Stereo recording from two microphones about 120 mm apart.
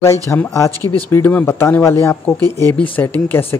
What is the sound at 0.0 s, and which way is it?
Speech, 25° left (ahead or behind).